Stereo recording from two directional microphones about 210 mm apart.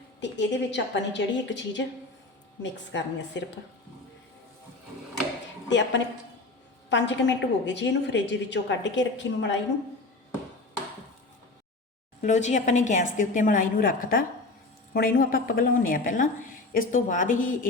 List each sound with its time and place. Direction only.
0.2 s a woman's voice: 55° left (ahead or behind)
5.6 s a woman's voice: 60° left (ahead or behind)
12.2 s a woman's voice: 35° left (ahead or behind)